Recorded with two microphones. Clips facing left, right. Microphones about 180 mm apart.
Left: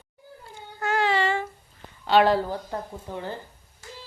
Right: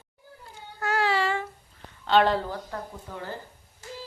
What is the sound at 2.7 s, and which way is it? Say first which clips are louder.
Speech: left 4 dB; 20° left (ahead or behind).